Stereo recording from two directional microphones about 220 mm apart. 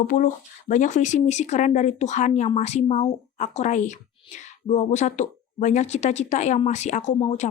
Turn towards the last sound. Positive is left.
turn(degrees=30)  # may be behind; listen again after turning